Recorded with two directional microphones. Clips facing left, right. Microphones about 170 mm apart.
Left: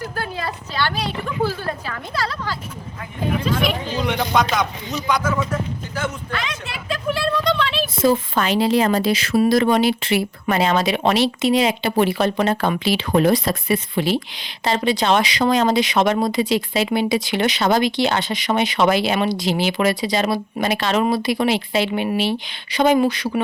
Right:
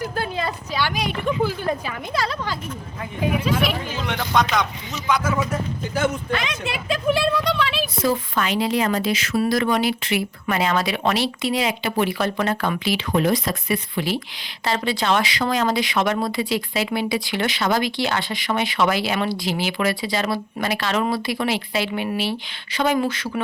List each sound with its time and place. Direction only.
0.0 s a woman's voice: 20° right (ahead or behind)
3.4 s speech: 5° right (ahead or behind)
8.0 s speech: 30° left (ahead or behind)